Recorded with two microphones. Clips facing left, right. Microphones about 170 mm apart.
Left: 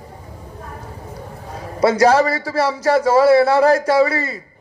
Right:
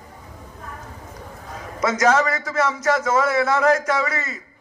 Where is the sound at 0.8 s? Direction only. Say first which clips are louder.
Left 5 dB; 35° left (ahead or behind).